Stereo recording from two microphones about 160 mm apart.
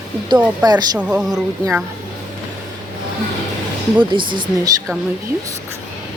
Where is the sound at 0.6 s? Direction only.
25° right (ahead or behind).